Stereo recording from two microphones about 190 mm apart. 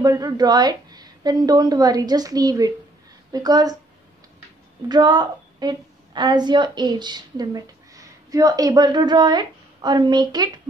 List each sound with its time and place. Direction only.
0.0 s a woman's voice: 20° right (ahead or behind)
4.8 s a woman's voice: 20° right (ahead or behind)